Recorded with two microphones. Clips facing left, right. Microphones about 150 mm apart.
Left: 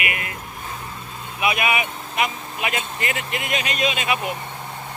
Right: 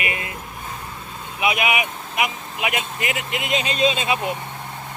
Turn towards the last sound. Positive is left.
turn(degrees=-25)  # may be behind; listen again after turning